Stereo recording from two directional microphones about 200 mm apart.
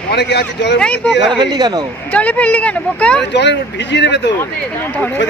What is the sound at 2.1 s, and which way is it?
Speech, 10° left (ahead or behind).